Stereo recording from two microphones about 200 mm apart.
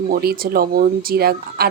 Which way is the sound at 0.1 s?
50° right (ahead or behind).